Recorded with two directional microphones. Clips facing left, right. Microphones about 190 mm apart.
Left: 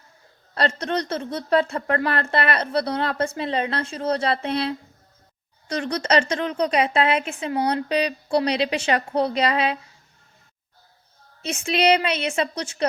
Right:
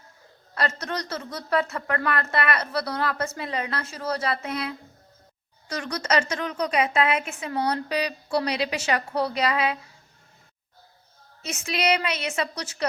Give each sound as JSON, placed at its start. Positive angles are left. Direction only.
{"t": 0.5, "sound": "a woman's voice", "side_deg": 30}
{"t": 11.4, "sound": "speech", "side_deg": 30}